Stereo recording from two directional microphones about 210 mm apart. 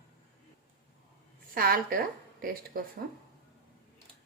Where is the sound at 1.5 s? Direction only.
45° right (ahead or behind).